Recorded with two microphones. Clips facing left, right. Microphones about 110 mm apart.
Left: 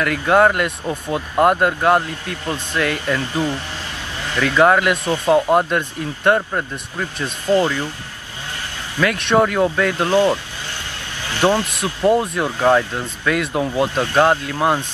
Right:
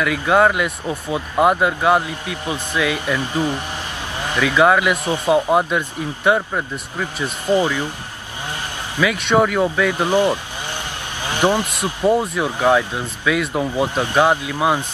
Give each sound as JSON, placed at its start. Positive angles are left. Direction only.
{"t": 0.0, "sound": "speech", "side_deg": 0}
{"t": 5.0, "sound": "speech", "side_deg": -15}
{"t": 5.5, "sound": "speech", "side_deg": -5}
{"t": 7.4, "sound": "speech", "side_deg": -15}
{"t": 9.0, "sound": "speech", "side_deg": -5}
{"t": 9.8, "sound": "speech", "side_deg": -15}
{"t": 11.2, "sound": "vehicle", "side_deg": -15}
{"t": 12.1, "sound": "speech", "side_deg": 0}
{"t": 12.4, "sound": "speech", "side_deg": -15}
{"t": 13.3, "sound": "speech", "side_deg": 0}
{"t": 13.8, "sound": "speech", "side_deg": -15}